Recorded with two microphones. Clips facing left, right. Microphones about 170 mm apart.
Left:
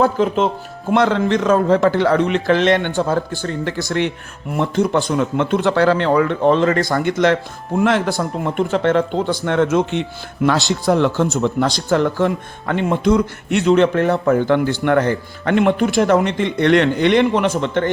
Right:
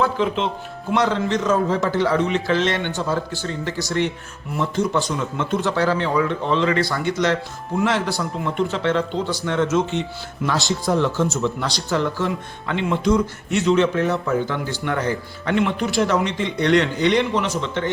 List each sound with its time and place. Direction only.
0.0 s speech: 45° left (ahead or behind)